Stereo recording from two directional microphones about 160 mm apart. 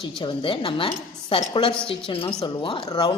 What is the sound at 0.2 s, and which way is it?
A woman's voice, 30° left (ahead or behind).